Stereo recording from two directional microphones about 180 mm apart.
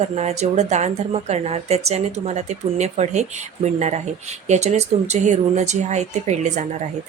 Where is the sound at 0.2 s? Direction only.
40° right (ahead or behind).